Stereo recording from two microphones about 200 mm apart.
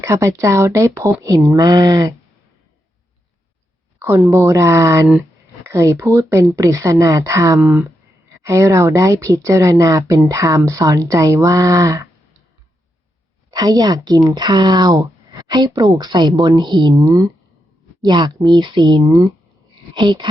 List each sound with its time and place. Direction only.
0.0 s speech: 15° right (ahead or behind)
4.0 s speech: 10° right (ahead or behind)
13.5 s speech: 20° right (ahead or behind)